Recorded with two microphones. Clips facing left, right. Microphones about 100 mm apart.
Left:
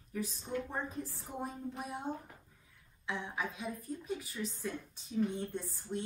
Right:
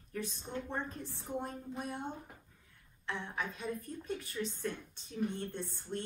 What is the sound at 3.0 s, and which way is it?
A woman's voice, 10° left (ahead or behind).